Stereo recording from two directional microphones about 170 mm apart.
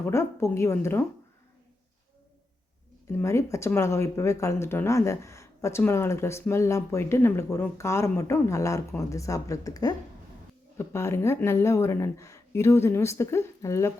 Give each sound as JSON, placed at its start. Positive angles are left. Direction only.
{"t": 0.0, "sound": "speech", "side_deg": 15}
{"t": 3.1, "sound": "speech", "side_deg": 15}